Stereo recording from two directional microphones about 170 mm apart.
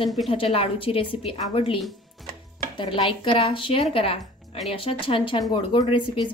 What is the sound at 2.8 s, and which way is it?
A woman's voice, 30° left (ahead or behind).